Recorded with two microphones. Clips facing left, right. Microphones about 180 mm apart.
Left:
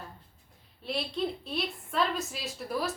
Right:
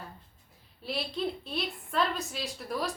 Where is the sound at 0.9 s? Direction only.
Centre (ahead or behind).